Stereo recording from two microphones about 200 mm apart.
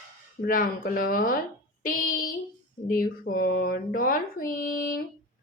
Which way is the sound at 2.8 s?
45° left (ahead or behind).